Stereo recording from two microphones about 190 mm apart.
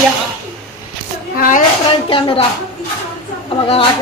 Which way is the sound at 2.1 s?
30° left (ahead or behind).